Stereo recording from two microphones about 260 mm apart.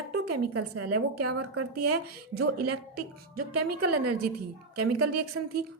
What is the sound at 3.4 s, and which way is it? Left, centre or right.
A woman's voice, right.